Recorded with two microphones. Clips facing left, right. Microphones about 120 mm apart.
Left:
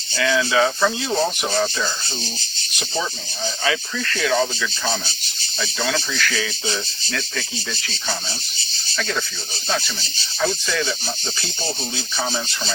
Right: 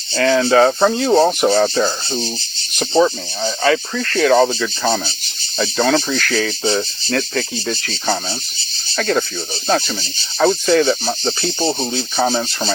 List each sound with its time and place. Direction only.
0.1 s speech: 50° right (ahead or behind)
3.0 s speech: 50° right (ahead or behind)